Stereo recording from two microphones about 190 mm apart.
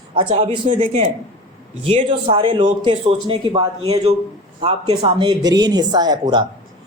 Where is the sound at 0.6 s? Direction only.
35° right (ahead or behind).